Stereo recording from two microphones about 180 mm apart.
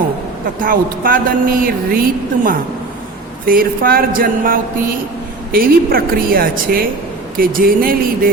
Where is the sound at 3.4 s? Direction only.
55° right (ahead or behind).